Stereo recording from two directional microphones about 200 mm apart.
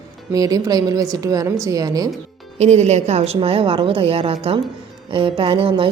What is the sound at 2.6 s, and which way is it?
A woman's voice, 35° right (ahead or behind).